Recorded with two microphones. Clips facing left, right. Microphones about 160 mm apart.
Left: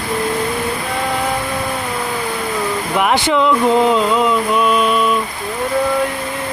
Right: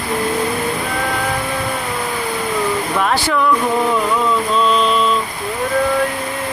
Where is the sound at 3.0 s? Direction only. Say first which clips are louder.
Left 4 dB; 20° left (ahead or behind).